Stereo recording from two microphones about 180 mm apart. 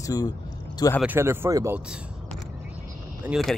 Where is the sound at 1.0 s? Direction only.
10° right (ahead or behind).